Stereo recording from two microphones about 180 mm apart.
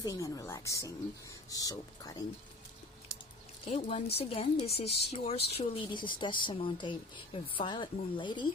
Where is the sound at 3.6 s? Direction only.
40° left (ahead or behind).